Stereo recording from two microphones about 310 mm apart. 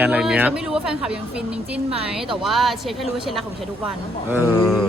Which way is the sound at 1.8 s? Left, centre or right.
Centre.